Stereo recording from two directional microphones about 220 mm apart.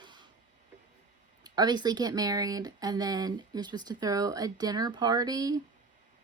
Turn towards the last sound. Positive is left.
turn(degrees=-15)  # may be behind; listen again after turning